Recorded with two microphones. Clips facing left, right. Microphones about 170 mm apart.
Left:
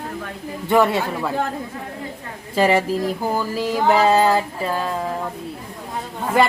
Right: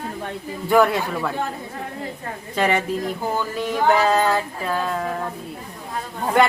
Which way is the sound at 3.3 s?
5° left (ahead or behind).